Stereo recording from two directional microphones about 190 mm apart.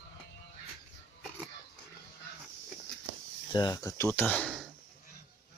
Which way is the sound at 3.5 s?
20° left (ahead or behind).